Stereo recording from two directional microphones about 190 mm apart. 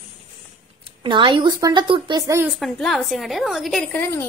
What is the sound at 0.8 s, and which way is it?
Speech, 25° right (ahead or behind).